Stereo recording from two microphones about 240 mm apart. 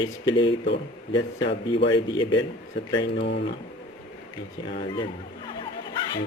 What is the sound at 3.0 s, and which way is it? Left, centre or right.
Speech, left.